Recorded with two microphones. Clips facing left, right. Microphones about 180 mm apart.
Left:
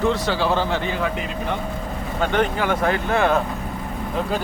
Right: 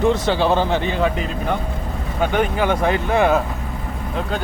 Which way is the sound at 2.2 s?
10° right (ahead or behind).